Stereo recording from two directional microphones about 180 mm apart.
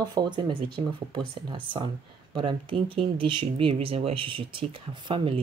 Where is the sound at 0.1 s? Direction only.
25° right (ahead or behind).